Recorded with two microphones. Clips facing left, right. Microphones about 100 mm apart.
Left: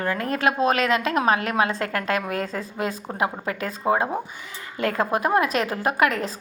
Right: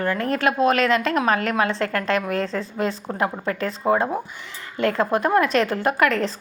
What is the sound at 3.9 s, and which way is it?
A woman's voice, 20° left (ahead or behind).